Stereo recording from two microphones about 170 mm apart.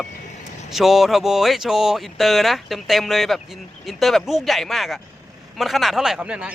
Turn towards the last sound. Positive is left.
turn(degrees=-5)  # may be behind; listen again after turning